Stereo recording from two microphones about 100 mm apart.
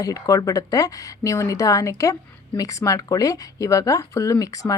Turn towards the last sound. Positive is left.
turn(degrees=35)  # may be behind; listen again after turning